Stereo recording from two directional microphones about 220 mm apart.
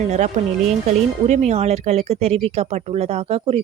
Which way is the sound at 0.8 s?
30° right (ahead or behind).